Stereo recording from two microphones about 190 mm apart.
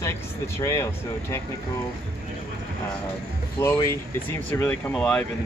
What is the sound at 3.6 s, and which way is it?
Speech, 15° left (ahead or behind).